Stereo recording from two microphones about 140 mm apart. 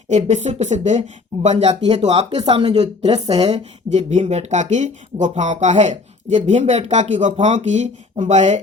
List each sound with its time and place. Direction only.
0.1 s speech: 55° right (ahead or behind)
2.3 s a woman's voice: 35° right (ahead or behind)
3.3 s a woman's voice: 30° right (ahead or behind)
3.8 s speech: 55° right (ahead or behind)